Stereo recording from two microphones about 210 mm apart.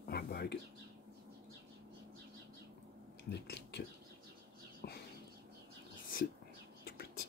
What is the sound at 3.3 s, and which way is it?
Speech, 55° left (ahead or behind).